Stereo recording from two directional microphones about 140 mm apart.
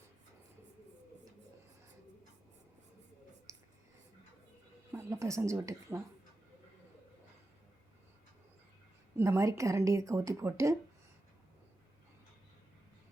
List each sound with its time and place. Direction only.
3.5 s a sound: 25° right (ahead or behind)
4.9 s a woman's voice: 20° right (ahead or behind)
9.1 s speech: 20° right (ahead or behind)